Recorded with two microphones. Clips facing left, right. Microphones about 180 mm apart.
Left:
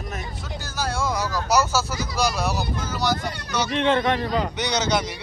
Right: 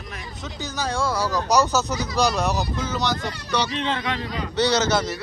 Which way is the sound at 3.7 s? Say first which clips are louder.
Left 6 dB; 55° left (ahead or behind).